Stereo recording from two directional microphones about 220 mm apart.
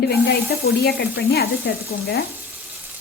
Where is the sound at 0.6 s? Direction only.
45° left (ahead or behind).